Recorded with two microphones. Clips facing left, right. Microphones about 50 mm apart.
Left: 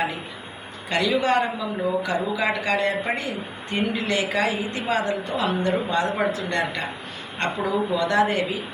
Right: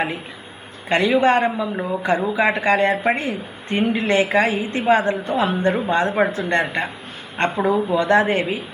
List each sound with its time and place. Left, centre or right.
0.9 s a woman's voice: right